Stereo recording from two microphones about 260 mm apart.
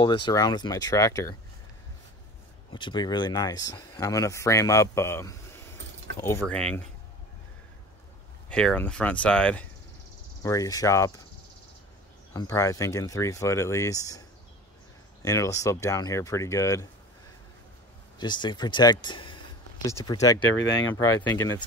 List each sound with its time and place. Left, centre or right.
0.0 s speech: centre
2.7 s speech: centre
8.5 s speech: centre
12.4 s speech: centre
15.2 s speech: centre
18.2 s speech: centre